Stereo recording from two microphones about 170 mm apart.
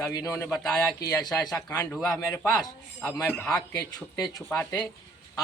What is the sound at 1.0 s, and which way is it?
Speech, 20° left (ahead or behind).